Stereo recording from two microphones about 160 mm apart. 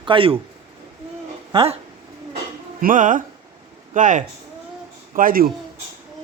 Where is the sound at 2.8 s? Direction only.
55° right (ahead or behind).